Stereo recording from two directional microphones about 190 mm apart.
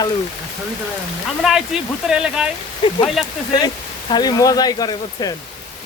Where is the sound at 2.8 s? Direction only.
25° left (ahead or behind).